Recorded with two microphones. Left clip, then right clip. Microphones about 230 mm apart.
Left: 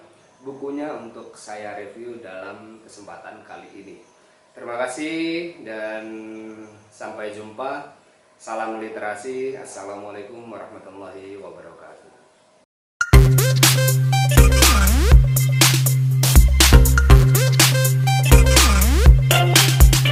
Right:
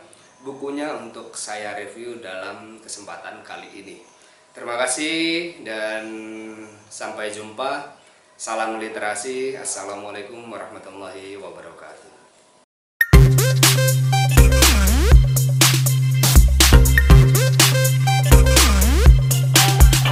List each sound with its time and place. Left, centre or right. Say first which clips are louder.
0.4 s speech: right 1 dB; left
0.8 s a sound: right 2 dB; centre
13.1 s music: right 1 dB; centre